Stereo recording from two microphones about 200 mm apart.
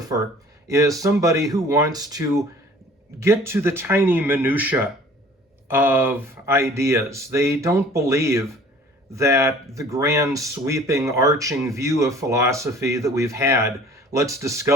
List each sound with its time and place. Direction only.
0.7 s speech: 15° right (ahead or behind)